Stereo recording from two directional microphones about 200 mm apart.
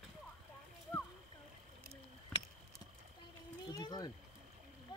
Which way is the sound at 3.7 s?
20° left (ahead or behind).